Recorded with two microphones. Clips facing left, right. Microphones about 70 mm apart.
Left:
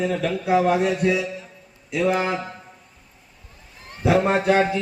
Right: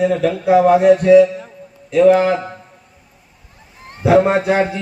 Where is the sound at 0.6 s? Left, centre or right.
Centre.